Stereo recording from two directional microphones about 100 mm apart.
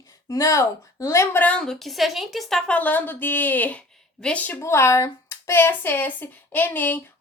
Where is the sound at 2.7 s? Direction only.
15° left (ahead or behind).